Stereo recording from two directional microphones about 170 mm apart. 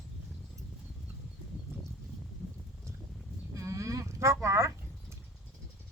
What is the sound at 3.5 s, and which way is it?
Livestock, 20° right (ahead or behind).